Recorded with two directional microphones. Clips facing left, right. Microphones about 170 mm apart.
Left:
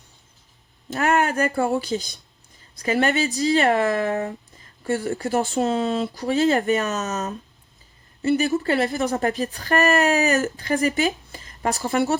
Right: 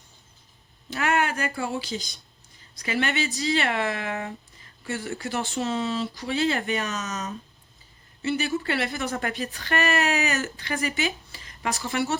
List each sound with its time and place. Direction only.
0.9 s speech: 45° left (ahead or behind)